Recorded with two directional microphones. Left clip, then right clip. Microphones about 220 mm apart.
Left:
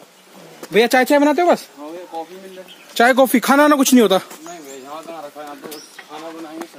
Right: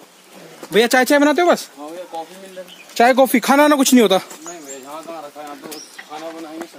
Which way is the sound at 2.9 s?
5° left (ahead or behind).